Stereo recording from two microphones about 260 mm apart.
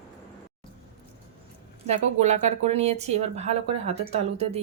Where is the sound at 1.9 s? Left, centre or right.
Right.